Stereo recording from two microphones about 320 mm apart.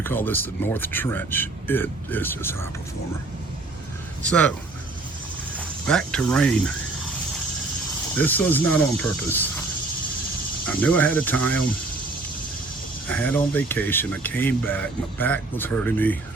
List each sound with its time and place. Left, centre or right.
0.0 s speech: centre
4.2 s speech: centre
5.5 s speech: centre
8.2 s speech: centre
10.7 s speech: centre
13.1 s speech: centre